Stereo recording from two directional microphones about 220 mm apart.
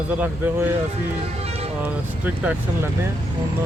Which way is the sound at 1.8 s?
5° right (ahead or behind).